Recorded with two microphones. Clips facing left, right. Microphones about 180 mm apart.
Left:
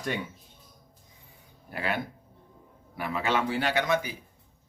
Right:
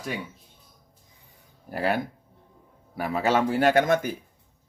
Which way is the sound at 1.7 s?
40° right (ahead or behind).